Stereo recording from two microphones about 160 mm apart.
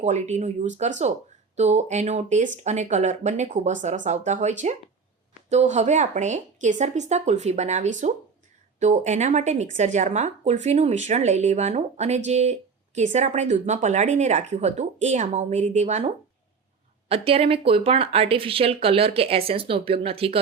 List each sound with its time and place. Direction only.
0.0 s speech: 45° right (ahead or behind)